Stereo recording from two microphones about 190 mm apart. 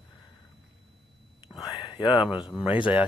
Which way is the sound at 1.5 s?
20° left (ahead or behind).